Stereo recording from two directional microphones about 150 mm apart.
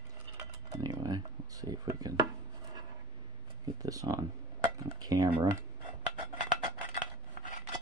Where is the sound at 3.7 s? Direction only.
25° right (ahead or behind).